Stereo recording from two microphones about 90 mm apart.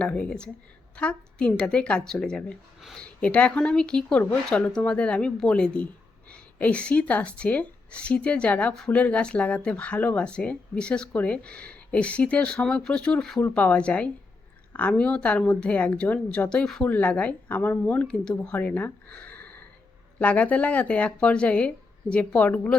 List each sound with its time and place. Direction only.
0.0 s speech: 10° left (ahead or behind)